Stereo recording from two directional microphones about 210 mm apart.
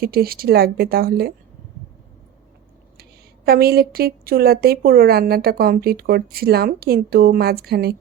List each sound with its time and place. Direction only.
0.0 s a woman's voice: 45° right (ahead or behind)
3.0 s a woman's voice: 45° right (ahead or behind)